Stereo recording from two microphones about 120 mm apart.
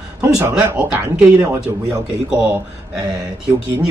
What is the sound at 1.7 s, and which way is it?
Speech, 30° right (ahead or behind).